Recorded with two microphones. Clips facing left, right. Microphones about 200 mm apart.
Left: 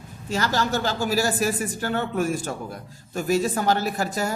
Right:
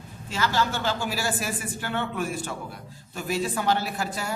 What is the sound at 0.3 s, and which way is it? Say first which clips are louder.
A woman's voice: left 2 dB; 40° left (ahead or behind).